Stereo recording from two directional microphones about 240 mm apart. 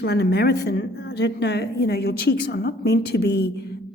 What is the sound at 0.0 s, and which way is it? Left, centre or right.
A woman's voice, left.